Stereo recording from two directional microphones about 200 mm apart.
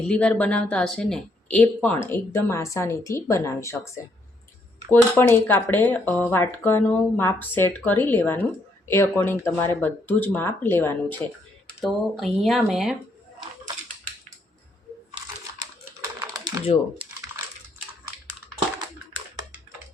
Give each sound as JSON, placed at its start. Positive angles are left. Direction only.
{"t": 0.0, "sound": "speech", "side_deg": 5}
{"t": 16.2, "sound": "typing", "side_deg": -15}